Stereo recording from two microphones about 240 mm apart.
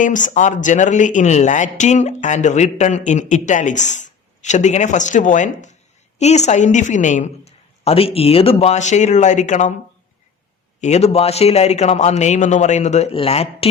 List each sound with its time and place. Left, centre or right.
0.0 s a woman's voice: left
10.8 s a woman's voice: left